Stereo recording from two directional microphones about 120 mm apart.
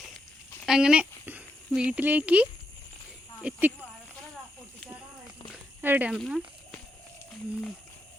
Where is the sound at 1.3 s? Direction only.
15° right (ahead or behind).